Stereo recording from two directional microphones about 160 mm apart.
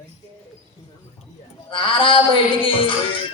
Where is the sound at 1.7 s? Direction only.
30° left (ahead or behind).